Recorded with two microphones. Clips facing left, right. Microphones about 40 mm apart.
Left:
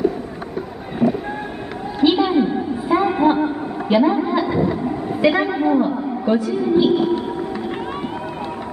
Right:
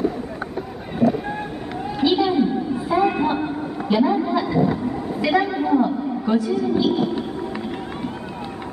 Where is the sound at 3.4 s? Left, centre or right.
Centre.